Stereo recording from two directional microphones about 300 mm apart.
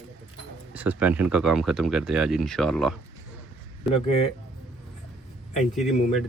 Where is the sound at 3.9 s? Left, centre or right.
Centre.